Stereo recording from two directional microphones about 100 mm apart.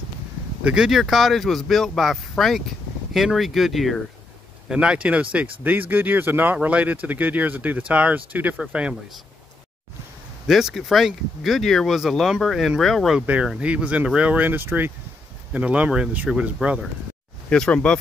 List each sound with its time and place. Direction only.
0.7 s speech: 5° right (ahead or behind)
4.6 s speech: 10° right (ahead or behind)
10.4 s speech: 5° right (ahead or behind)
13.2 s speech: 10° right (ahead or behind)
17.5 s speech: 10° left (ahead or behind)